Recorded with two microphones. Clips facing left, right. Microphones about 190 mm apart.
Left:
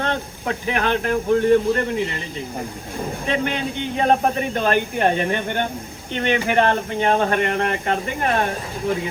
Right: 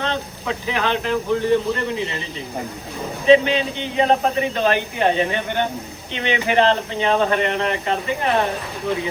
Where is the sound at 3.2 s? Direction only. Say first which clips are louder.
Right 10 dB; 50° left (ahead or behind).